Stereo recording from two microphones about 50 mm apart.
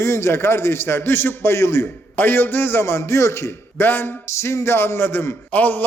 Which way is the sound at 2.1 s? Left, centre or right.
Left.